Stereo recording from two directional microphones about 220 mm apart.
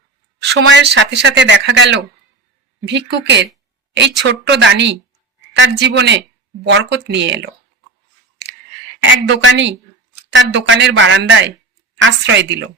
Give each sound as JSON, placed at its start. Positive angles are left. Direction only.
{"t": 0.3, "sound": "speech", "side_deg": -50}
{"t": 9.2, "sound": "speech", "side_deg": -55}